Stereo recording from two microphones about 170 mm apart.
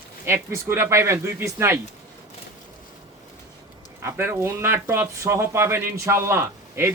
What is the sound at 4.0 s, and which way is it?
Speech, 15° right (ahead or behind).